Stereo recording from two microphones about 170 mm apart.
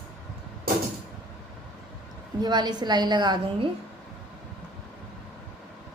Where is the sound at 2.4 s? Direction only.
25° right (ahead or behind).